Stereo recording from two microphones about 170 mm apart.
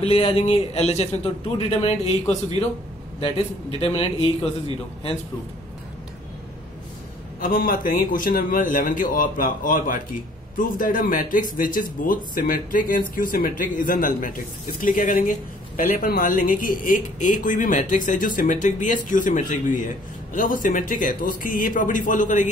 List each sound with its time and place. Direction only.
0.0 s a man's voice: 35° left (ahead or behind)
7.3 s speech: 55° left (ahead or behind)